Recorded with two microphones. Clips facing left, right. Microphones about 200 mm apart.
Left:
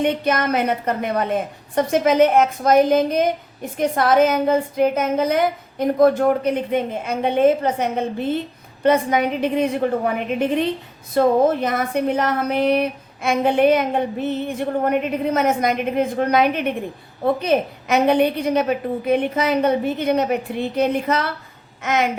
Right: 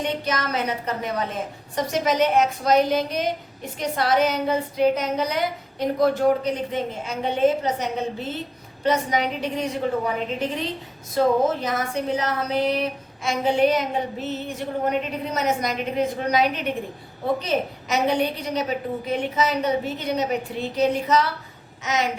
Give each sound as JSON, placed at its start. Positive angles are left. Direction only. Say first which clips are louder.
{"t": 0.0, "sound": "a woman's voice", "louder": "left 6 dB", "side_deg": 55}